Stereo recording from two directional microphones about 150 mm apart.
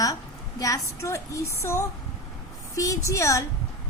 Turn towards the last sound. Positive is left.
turn(degrees=20)  # may be behind; listen again after turning